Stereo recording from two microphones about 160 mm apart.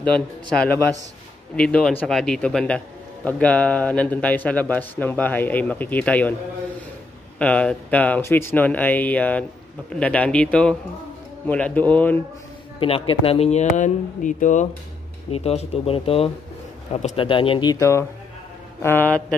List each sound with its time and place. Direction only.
0.0 s speech: 5° left (ahead or behind)
7.3 s speech: 5° left (ahead or behind)
12.8 s speech: 35° left (ahead or behind); by 14.7 s 50° left (ahead or behind)
15.3 s speech: 40° left (ahead or behind); by 19.2 s 10° left (ahead or behind)